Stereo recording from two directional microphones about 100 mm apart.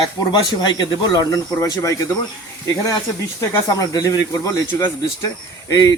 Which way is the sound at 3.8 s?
35° left (ahead or behind).